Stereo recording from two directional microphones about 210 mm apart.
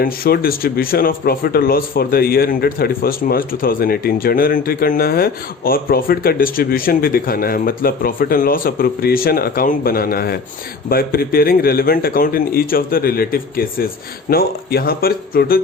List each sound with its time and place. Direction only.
0.0 s speech: 45° left (ahead or behind)